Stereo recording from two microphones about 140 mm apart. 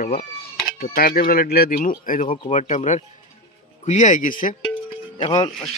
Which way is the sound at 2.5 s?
60° left (ahead or behind).